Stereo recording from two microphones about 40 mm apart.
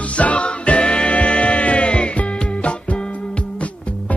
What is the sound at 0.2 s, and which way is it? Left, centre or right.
Music, left.